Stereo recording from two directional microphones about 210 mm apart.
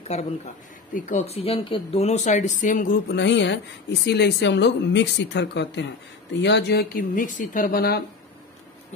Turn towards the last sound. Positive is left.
turn(degrees=45)  # may be behind; listen again after turning